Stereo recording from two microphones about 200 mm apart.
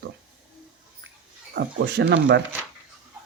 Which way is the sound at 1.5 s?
55° right (ahead or behind).